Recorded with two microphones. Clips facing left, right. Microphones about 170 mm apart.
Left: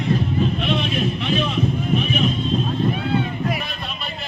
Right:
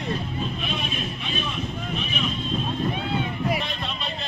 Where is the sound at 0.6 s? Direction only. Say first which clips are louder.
Left 8 dB; 75° left (ahead or behind).